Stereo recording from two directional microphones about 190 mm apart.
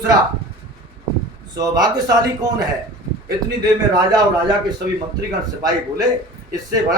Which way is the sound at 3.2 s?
20° right (ahead or behind).